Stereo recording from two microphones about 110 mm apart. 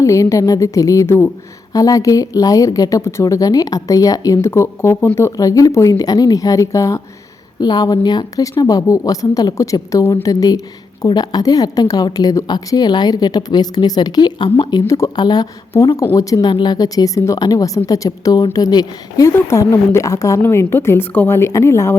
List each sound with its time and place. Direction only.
0.0 s a woman's voice: 30° left (ahead or behind)